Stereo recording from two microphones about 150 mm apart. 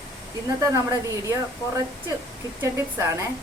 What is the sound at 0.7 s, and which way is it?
Speech, 20° right (ahead or behind).